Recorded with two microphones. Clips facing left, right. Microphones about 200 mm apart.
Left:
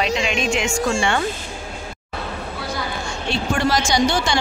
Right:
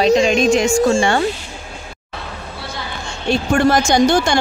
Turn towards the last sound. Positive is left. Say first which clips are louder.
# right 5 dB
turn(degrees=-50)  # may be behind; listen again after turning